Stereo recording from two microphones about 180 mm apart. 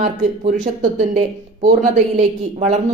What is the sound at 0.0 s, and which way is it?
Speech, 40° right (ahead or behind).